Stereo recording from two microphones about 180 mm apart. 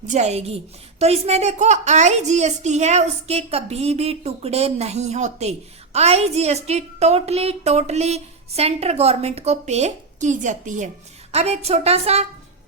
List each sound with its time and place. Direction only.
0.1 s a woman's voice: 40° right (ahead or behind)